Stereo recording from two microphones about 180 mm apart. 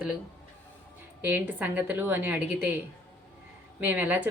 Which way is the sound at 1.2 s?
10° right (ahead or behind).